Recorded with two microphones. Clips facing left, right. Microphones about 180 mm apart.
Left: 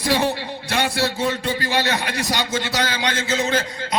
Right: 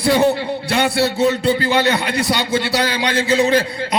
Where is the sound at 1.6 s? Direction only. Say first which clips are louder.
Right 5 dB; 60° right (ahead or behind).